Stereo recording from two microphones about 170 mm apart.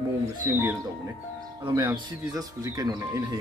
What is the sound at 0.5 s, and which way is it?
Speech, 15° right (ahead or behind).